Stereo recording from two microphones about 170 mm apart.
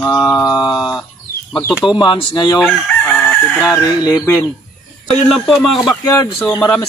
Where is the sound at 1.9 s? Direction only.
25° left (ahead or behind).